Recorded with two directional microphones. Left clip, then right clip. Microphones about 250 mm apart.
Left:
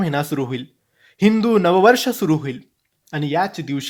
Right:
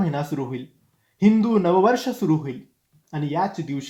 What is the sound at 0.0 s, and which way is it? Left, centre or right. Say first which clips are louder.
Speech: left 5 dB; left.